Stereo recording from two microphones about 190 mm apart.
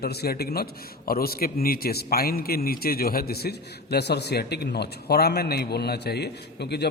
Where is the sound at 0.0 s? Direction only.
55° left (ahead or behind).